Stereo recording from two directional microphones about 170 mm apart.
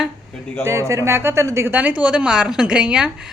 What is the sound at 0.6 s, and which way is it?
A man's voice, 15° right (ahead or behind).